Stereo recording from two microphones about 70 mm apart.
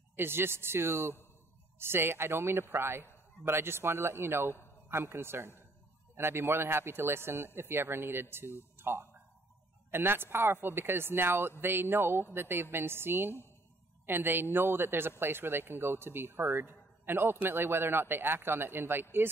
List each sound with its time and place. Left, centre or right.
0.1 s a man's voice: right